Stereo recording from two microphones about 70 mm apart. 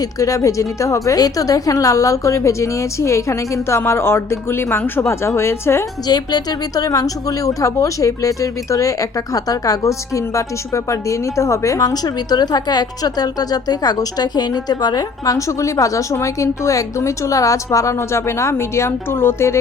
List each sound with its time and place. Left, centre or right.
0.0 s a woman's voice: left
6.1 s a woman's voice: left
12.0 s a woman's voice: left